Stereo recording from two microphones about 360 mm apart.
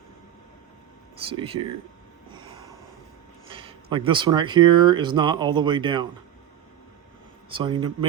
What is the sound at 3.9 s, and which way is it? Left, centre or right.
Speech, centre.